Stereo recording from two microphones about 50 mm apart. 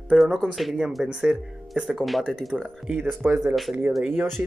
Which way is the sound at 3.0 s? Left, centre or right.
Right.